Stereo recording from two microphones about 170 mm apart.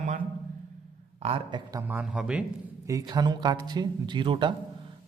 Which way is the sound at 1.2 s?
30° right (ahead or behind).